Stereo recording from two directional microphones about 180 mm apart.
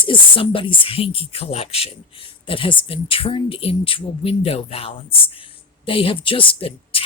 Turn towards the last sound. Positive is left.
turn(degrees=30)  # may be behind; listen again after turning